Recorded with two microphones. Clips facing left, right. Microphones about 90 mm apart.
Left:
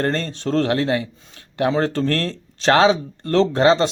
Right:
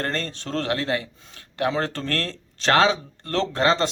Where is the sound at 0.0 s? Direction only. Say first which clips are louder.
Left 6 dB; 20° left (ahead or behind).